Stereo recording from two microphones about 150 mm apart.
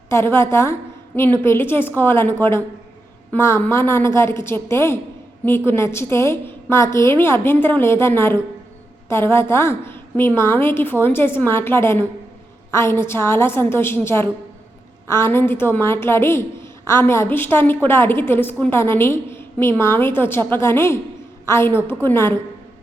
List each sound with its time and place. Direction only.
0.1 s a woman's voice: 15° left (ahead or behind)